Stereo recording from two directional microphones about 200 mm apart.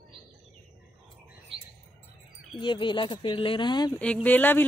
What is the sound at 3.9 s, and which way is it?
Speech, 5° left (ahead or behind).